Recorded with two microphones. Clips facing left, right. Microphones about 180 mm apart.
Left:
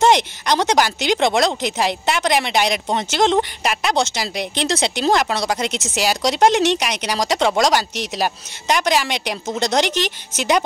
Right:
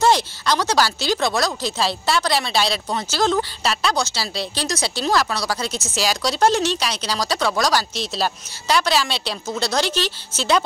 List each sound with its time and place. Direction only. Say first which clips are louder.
0.0 s speech: left 2 dB; 20° left (ahead or behind)